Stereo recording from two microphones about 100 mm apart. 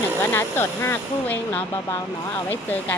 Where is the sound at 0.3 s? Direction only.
25° left (ahead or behind).